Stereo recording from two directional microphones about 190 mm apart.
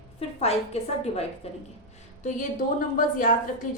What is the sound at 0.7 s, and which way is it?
Speech, 35° left (ahead or behind).